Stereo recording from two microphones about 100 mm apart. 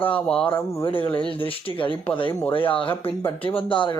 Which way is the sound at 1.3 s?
65° left (ahead or behind).